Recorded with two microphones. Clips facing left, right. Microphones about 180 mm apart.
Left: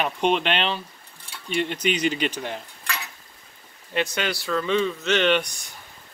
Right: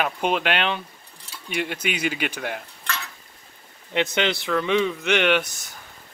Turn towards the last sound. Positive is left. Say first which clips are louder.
# even
turn(degrees=-5)  # may be behind; listen again after turning